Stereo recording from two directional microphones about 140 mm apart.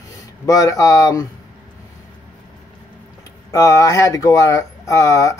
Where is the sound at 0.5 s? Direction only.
25° left (ahead or behind).